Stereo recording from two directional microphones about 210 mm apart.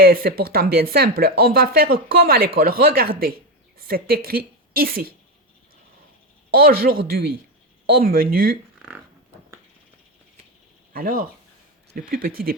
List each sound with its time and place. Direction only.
0.0 s speech: 45° right (ahead or behind)
6.6 s speech: 45° right (ahead or behind)
10.9 s speech: 45° right (ahead or behind)